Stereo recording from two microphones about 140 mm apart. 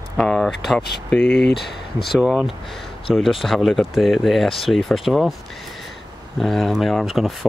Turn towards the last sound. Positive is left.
turn(degrees=0)  # may be behind; listen again after turning